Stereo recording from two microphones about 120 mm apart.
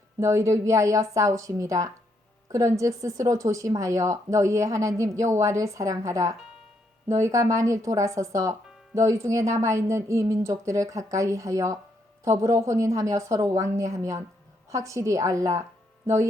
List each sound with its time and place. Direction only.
0.2 s speech: 25° right (ahead or behind)